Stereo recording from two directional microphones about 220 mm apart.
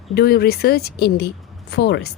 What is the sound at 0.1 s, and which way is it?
A woman's voice, 45° left (ahead or behind).